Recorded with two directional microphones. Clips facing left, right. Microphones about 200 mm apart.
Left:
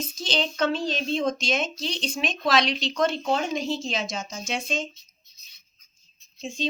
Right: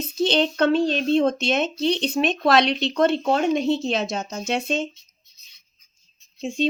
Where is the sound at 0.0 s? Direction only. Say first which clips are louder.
Right 8 dB; 60° right (ahead or behind).